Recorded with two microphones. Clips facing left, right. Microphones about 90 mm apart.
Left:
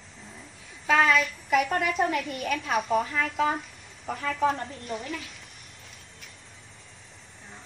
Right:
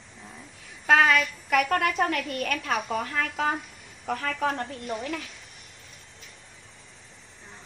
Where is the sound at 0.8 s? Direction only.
60° right (ahead or behind).